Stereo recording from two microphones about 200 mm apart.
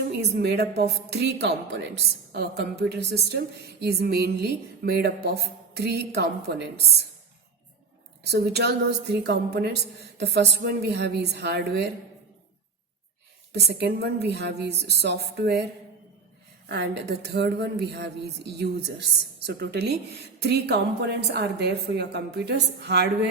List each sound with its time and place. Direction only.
0.1 s a woman's voice: 55° right (ahead or behind)
8.2 s speech: 55° right (ahead or behind)
13.7 s speech: 55° right (ahead or behind)
16.6 s speech: 55° right (ahead or behind)